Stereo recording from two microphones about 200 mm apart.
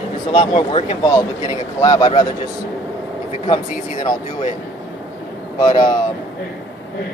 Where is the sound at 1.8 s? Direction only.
20° left (ahead or behind).